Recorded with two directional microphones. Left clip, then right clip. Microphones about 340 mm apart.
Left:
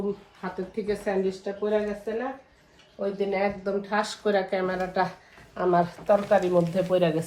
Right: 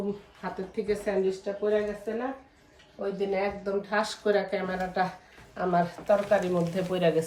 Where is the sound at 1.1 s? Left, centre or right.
Centre.